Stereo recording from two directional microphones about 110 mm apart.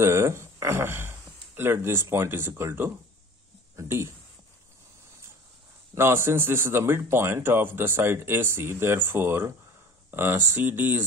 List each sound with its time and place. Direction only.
0.0 s speech: 25° right (ahead or behind)
5.9 s speech: 20° right (ahead or behind)